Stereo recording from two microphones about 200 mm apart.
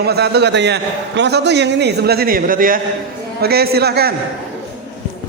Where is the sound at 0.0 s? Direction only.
55° right (ahead or behind).